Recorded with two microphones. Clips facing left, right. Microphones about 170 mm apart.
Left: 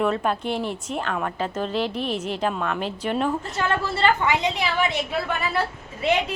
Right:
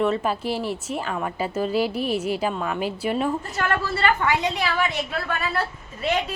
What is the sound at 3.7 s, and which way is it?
A woman's voice, 20° left (ahead or behind).